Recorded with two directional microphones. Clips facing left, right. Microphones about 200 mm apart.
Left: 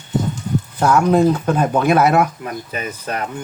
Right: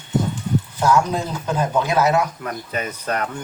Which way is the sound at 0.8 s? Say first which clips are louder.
Left 6 dB; 60° left (ahead or behind).